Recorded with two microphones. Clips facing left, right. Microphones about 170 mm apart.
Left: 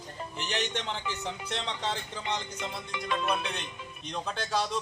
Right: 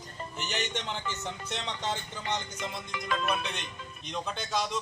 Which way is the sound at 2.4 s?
30° left (ahead or behind).